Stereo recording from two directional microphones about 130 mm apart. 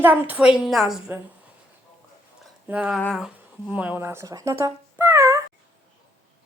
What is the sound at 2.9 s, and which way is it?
Speech, 5° left (ahead or behind).